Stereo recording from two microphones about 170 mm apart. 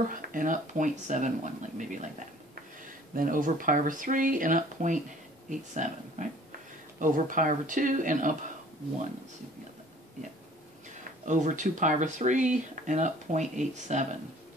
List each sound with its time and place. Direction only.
0.1 s speech: 50° right (ahead or behind)
11.2 s speech: 45° right (ahead or behind)